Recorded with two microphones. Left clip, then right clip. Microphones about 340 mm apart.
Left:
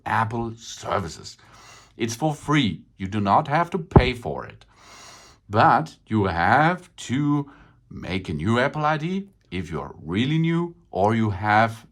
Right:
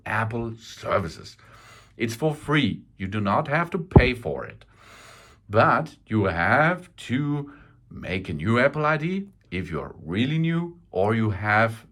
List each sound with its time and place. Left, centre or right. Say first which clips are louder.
0.0 s speech: left 3 dB; centre